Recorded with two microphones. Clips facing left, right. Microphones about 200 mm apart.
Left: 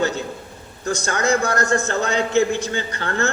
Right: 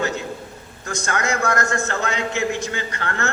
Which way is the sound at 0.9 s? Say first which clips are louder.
Left 4 dB; 30° left (ahead or behind).